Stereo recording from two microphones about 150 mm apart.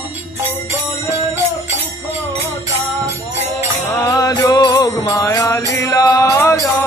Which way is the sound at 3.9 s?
20° left (ahead or behind).